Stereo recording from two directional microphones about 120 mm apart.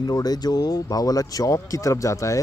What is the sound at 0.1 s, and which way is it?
Speech, 35° left (ahead or behind).